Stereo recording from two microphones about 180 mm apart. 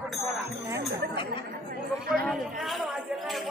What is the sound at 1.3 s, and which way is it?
Chatter, 55° right (ahead or behind).